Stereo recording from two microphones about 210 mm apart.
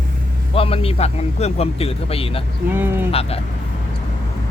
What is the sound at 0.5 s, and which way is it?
Speech, 25° left (ahead or behind).